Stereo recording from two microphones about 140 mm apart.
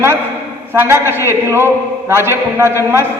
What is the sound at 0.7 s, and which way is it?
A man's voice, 15° right (ahead or behind).